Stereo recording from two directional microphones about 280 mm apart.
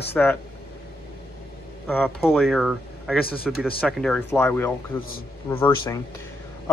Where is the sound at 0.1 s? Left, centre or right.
Centre.